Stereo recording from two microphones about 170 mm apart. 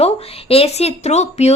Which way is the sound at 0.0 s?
35° left (ahead or behind).